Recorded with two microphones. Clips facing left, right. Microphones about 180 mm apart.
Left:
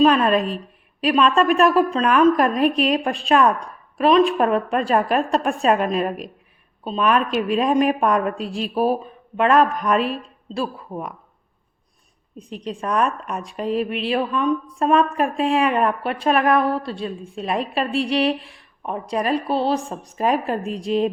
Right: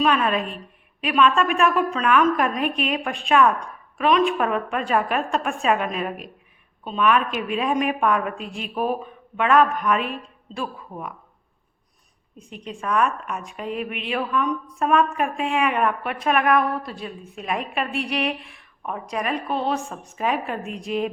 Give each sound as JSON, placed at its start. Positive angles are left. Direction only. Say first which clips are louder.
{"t": 0.0, "sound": "a woman's voice", "louder": "left 5 dB", "side_deg": 35}
{"t": 12.4, "sound": "a woman's voice", "louder": "left 5 dB", "side_deg": 35}